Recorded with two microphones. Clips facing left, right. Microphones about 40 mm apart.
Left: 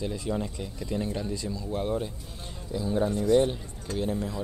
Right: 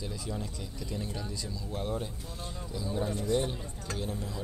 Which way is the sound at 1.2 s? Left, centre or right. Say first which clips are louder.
Left 6 dB; centre.